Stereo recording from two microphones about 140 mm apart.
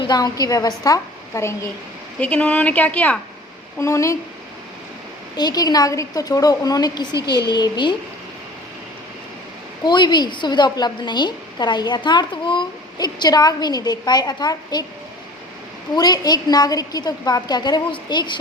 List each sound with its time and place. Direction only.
0.1 s a woman's voice: 25° left (ahead or behind)
2.1 s speech: 10° left (ahead or behind)
3.8 s a woman's voice: 20° left (ahead or behind)
5.4 s a woman's voice: 30° left (ahead or behind)
9.8 s a woman's voice: 30° left (ahead or behind)
16.0 s a woman's voice: 30° left (ahead or behind)